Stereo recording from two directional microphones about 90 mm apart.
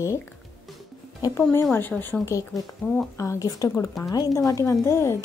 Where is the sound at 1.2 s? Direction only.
40° left (ahead or behind).